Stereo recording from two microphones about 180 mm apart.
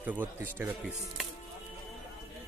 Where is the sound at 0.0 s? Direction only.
10° right (ahead or behind).